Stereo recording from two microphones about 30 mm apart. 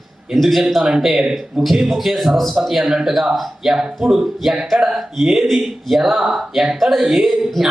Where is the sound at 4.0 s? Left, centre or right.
Right.